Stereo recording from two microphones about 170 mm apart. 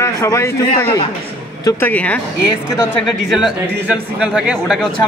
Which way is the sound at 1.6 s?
10° left (ahead or behind).